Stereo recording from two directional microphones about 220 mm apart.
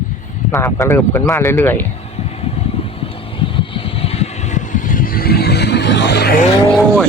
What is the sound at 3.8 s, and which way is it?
Vehicle, 25° left (ahead or behind).